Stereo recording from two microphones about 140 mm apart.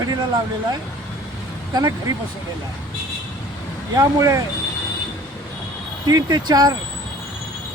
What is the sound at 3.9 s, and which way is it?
Speech, 25° right (ahead or behind).